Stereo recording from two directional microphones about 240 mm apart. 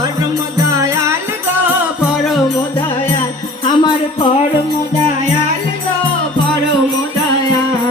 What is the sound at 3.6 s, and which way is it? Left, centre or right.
Music, centre.